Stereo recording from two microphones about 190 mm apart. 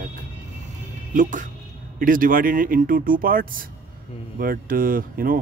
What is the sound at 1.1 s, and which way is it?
Speech, 45° right (ahead or behind).